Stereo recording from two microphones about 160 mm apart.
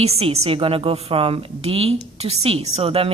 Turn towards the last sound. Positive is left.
turn(degrees=-35)  # may be behind; listen again after turning